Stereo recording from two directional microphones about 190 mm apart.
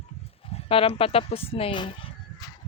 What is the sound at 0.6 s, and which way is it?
Speech, 30° left (ahead or behind).